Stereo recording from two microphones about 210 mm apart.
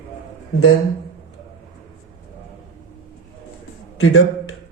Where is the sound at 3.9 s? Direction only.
80° left.